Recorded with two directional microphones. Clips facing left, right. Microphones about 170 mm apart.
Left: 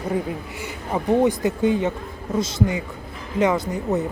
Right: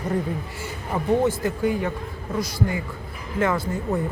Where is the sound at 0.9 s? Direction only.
20° left (ahead or behind).